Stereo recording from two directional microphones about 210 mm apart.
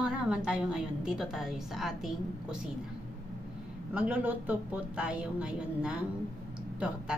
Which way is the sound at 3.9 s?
5° right (ahead or behind).